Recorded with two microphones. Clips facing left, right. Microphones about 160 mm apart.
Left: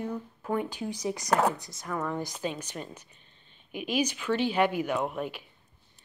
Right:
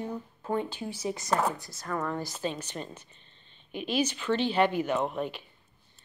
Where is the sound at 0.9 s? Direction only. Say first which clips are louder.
Left 2 dB; 15° left (ahead or behind).